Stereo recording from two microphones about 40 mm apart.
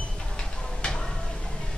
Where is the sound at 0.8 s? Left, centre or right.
Left.